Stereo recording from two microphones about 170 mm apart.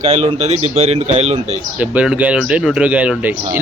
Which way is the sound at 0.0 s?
40° right (ahead or behind).